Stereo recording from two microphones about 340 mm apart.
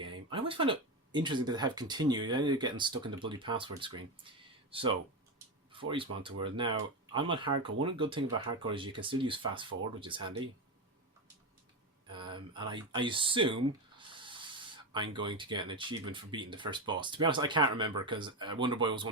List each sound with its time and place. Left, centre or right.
0.0 s speech: centre
12.3 s speech: centre